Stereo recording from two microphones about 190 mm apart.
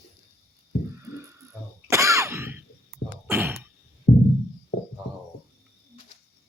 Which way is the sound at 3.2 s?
10° right (ahead or behind).